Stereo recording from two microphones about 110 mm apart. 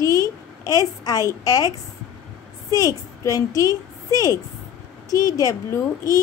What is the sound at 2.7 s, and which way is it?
A child's voice, 30° left (ahead or behind).